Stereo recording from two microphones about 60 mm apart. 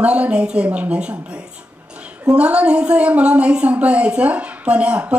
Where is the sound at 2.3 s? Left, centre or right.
Centre.